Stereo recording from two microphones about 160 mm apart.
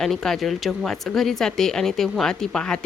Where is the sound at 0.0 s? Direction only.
Centre (ahead or behind).